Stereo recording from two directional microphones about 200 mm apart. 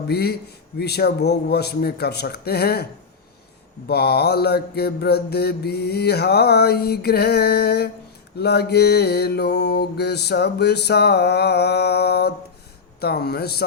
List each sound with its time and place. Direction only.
0.1 s mantra: 50° left (ahead or behind)
3.8 s mantra: 50° left (ahead or behind)